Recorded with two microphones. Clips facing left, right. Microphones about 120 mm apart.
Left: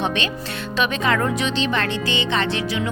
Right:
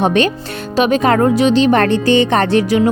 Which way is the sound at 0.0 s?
40° right (ahead or behind).